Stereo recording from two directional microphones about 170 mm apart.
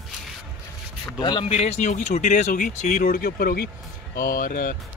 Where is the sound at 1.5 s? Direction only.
40° left (ahead or behind).